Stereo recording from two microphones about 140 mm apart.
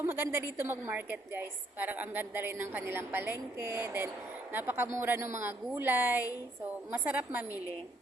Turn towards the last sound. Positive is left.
turn(degrees=-10)  # may be behind; listen again after turning